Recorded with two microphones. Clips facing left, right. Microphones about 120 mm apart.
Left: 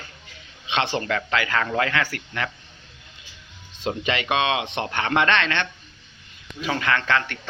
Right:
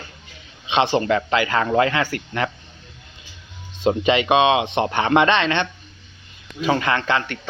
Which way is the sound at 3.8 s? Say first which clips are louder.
Right 8 dB; 20° right (ahead or behind).